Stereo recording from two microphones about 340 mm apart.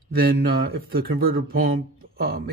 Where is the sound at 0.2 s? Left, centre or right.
Right.